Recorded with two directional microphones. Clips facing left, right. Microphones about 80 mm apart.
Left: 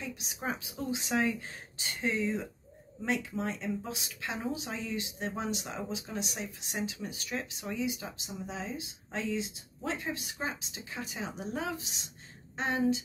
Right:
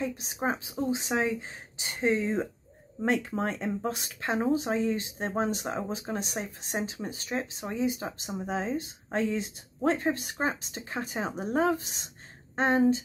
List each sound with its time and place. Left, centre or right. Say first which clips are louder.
0.0 s a woman's voice: right 7 dB; right